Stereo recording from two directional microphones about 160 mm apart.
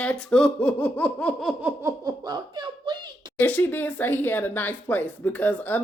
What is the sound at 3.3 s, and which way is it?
Speech, 10° left (ahead or behind).